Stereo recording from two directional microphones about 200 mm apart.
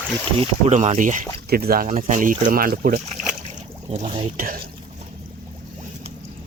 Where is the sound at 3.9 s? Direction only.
30° right (ahead or behind).